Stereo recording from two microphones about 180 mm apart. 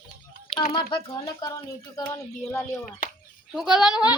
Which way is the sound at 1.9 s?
15° left (ahead or behind).